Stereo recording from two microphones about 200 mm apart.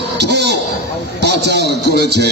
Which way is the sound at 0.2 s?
55° right (ahead or behind).